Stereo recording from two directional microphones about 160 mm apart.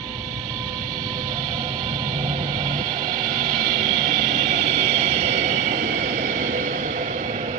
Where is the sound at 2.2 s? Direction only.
50° right (ahead or behind).